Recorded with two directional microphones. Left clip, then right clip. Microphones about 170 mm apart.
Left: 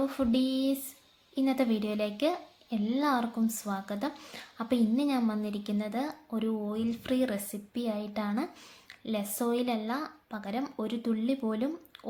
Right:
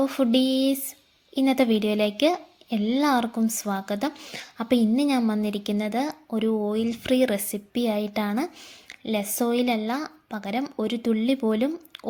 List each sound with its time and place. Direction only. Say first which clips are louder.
0.0 s speech: right 7 dB; 40° right (ahead or behind)